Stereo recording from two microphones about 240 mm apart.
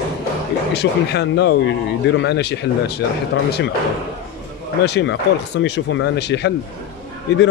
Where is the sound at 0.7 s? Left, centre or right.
Left.